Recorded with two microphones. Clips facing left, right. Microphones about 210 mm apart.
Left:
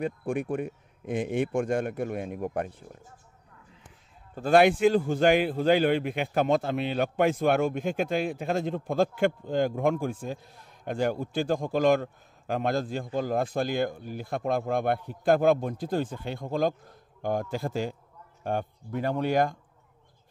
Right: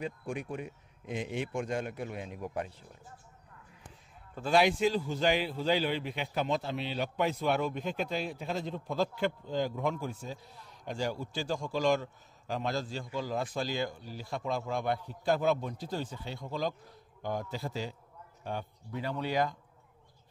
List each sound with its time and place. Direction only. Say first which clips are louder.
0.0 s a man's voice: left 7 dB; 55° left (ahead or behind)
4.4 s a man's voice: left 6 dB; 55° left (ahead or behind)